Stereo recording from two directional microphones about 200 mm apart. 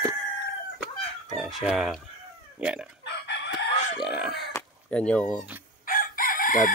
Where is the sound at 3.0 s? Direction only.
60° left (ahead or behind).